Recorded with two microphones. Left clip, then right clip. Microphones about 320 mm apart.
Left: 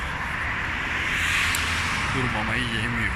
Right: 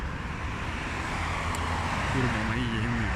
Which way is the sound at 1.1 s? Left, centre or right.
Centre.